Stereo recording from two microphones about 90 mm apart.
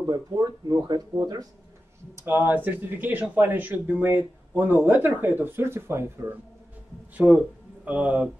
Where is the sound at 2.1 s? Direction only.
25° right (ahead or behind).